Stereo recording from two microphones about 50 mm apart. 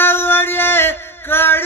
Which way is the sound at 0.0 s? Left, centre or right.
Left.